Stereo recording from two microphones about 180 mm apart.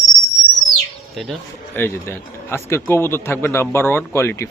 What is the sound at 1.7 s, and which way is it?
A man's voice, 10° left (ahead or behind).